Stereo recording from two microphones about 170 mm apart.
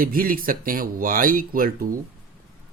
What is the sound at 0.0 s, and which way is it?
Speech, 60° right (ahead or behind).